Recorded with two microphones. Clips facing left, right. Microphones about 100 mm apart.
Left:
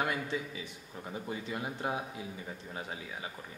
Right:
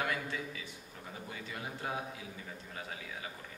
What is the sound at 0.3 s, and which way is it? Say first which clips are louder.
Speech: left 4 dB; 20° left (ahead or behind).